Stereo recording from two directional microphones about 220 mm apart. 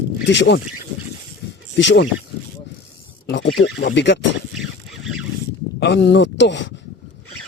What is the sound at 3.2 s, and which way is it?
Speech, 55° left (ahead or behind).